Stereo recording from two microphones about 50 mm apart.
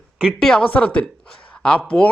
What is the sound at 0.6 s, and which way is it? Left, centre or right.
Speech, left.